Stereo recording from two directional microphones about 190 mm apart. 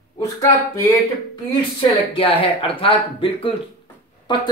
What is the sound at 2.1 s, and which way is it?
Speech, 30° left (ahead or behind).